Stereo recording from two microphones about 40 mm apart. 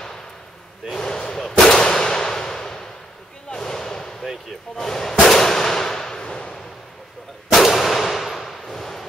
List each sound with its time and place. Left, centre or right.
0.9 s slam: centre
1.7 s clang: centre
3.4 s a sound: centre
4.7 s speech: centre
5.2 s a sound: centre
7.5 s clang: centre